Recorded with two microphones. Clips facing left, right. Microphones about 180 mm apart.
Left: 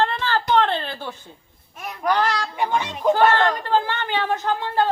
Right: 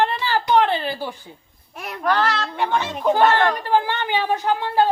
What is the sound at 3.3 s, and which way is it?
Speech, 15° right (ahead or behind).